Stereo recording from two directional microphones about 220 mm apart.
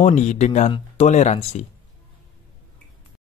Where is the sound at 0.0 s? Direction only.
30° left (ahead or behind).